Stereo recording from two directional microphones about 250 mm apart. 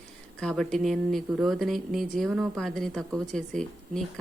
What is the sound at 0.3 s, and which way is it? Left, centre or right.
Speech, centre.